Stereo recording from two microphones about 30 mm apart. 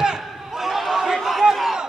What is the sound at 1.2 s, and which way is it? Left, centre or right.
Crowd, centre.